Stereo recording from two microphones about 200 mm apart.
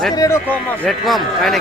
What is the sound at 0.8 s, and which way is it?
Speech, centre (ahead or behind).